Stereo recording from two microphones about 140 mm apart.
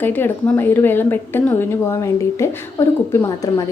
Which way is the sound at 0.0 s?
15° left (ahead or behind).